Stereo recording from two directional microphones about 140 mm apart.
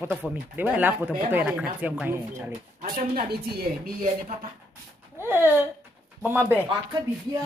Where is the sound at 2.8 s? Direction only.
90° right.